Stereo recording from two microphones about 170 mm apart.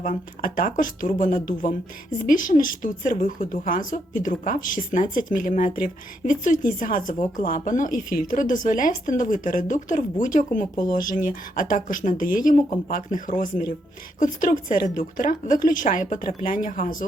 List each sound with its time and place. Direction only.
0.0 s speech: 50° left (ahead or behind)